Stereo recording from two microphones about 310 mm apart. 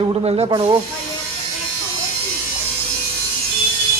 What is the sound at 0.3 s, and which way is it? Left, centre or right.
Speech, centre.